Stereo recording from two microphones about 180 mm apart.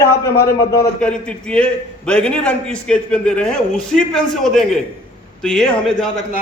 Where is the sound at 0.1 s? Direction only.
15° left (ahead or behind).